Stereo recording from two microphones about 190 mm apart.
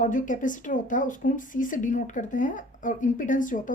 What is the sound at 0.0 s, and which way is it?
A woman's voice, 45° left (ahead or behind).